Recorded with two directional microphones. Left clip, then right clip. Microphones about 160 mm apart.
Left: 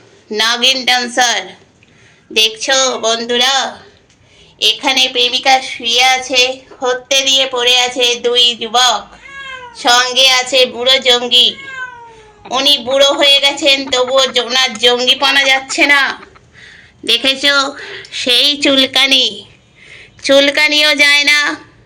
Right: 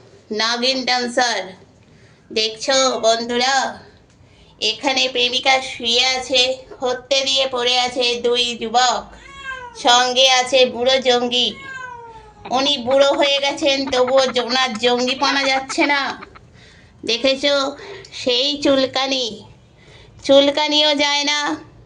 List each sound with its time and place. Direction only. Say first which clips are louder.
0.3 s a woman's voice: left 7 dB; centre (ahead or behind)
9.7 s a woman's voice: left 3 dB; 10° right (ahead or behind)